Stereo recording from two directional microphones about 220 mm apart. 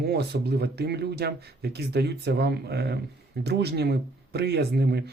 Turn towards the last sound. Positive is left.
turn(degrees=-50)  # may be behind; listen again after turning